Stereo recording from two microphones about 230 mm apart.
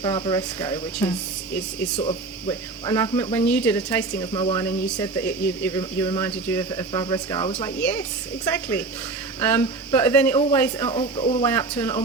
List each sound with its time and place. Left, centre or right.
0.0 s speech: centre
2.5 s speech: centre
7.8 s speech: centre
10.8 s speech: left
11.4 s speech: centre